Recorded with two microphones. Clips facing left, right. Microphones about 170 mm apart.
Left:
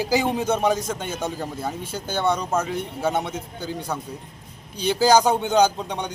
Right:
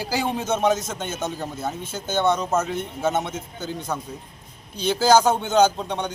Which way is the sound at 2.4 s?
5° right (ahead or behind).